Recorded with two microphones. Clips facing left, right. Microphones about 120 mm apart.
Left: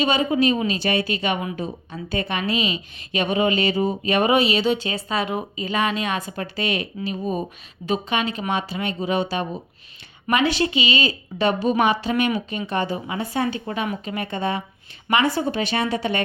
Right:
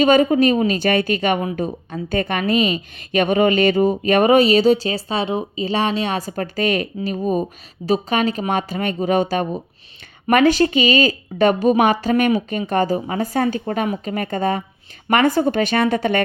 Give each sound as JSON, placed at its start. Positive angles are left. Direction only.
{"t": 0.0, "sound": "a woman's voice", "side_deg": -45}